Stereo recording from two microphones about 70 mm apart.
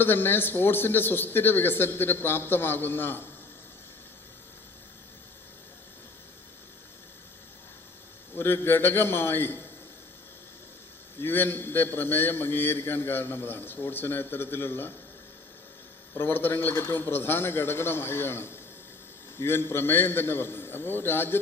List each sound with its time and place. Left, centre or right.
0.0 s a man's voice: left
8.4 s a man's voice: left
11.2 s a man's voice: left
16.1 s a man's voice: left